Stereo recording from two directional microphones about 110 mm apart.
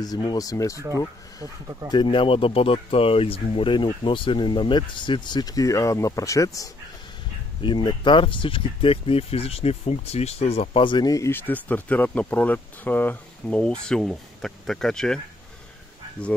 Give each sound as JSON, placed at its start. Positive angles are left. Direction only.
{"t": 0.0, "sound": "speech", "side_deg": 35}
{"t": 1.9, "sound": "speech", "side_deg": 45}
{"t": 7.6, "sound": "speech", "side_deg": 45}
{"t": 11.1, "sound": "speech", "side_deg": 25}